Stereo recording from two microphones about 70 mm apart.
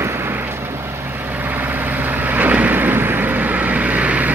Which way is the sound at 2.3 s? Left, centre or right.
Right.